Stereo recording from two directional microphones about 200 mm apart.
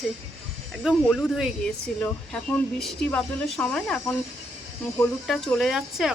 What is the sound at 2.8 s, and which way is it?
Speech, centre (ahead or behind).